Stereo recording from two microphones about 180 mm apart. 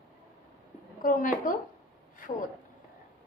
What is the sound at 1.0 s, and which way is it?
Speech, 50° left (ahead or behind).